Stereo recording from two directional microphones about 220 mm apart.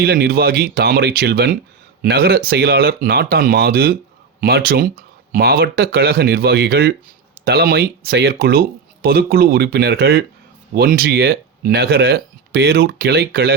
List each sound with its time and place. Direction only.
0.0 s speech: 45° right (ahead or behind)